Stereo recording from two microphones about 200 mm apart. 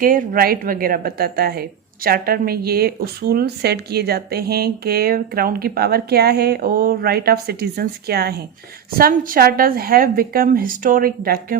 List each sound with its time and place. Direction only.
0.0 s a woman's voice: 45° right (ahead or behind)